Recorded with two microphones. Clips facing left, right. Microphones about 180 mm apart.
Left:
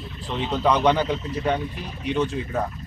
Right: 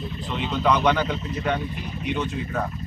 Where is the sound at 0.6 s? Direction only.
30° left (ahead or behind).